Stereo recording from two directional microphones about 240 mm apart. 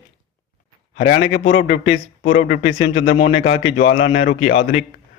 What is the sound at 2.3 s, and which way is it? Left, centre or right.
Speech, left.